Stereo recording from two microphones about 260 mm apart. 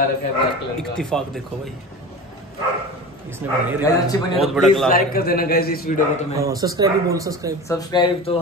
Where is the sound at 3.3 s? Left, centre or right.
Centre.